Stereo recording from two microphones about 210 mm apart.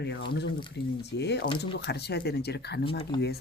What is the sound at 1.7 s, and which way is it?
Speech, 55° left (ahead or behind).